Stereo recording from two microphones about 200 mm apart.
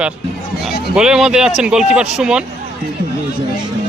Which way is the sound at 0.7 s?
55° left (ahead or behind).